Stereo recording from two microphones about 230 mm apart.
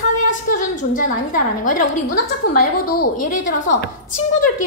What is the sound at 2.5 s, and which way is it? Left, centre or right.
Speech, left.